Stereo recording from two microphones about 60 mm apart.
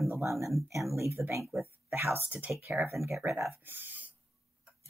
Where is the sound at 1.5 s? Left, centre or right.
Right.